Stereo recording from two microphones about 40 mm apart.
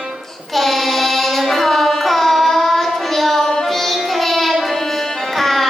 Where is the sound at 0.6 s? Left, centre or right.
Centre.